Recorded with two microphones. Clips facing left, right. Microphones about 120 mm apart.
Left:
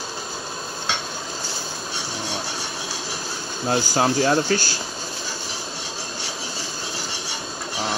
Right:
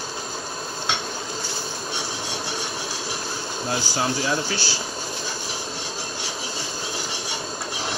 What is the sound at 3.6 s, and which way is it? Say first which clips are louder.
Speech: left 5 dB; 50° left (ahead or behind).